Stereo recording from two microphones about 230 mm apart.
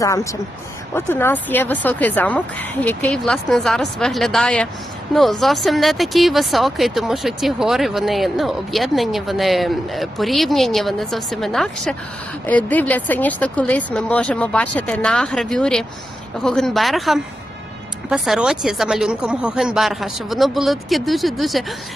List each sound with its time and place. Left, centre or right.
0.0 s speech: centre